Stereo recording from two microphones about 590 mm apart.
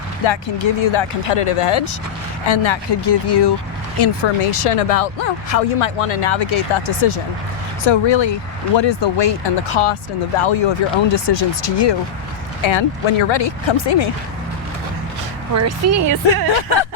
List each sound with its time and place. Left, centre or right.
0.3 s speech: left
4.4 s speech: left
15.5 s speech: right